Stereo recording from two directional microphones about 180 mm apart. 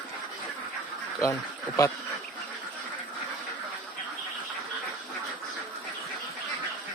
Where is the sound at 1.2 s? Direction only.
20° left (ahead or behind).